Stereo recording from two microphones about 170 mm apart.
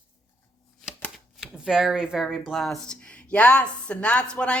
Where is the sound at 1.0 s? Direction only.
Centre (ahead or behind).